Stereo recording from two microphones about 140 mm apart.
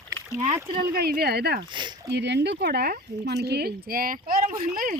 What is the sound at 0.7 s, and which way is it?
Speech, 90° right.